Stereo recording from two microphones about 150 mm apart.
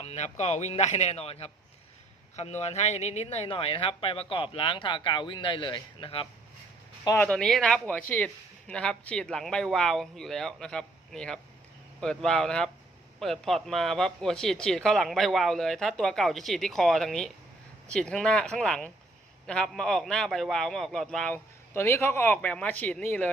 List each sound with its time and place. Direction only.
0.0 s a man's voice: 45° left (ahead or behind)
7.3 s speech: 5° left (ahead or behind)
21.7 s speech: 15° left (ahead or behind)